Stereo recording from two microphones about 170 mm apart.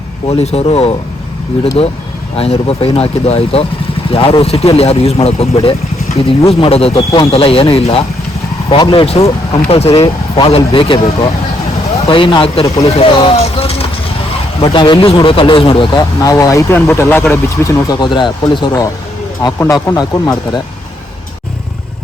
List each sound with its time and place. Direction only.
0.3 s speech: 35° left (ahead or behind)
2.3 s speech: 35° left (ahead or behind)
6.9 s speech: 20° left (ahead or behind)
7.3 s speech: 35° left (ahead or behind)